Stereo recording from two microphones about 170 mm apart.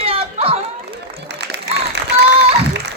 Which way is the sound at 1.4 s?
90° right.